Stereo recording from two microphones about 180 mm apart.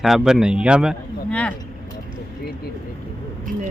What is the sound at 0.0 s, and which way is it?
Speech, centre (ahead or behind).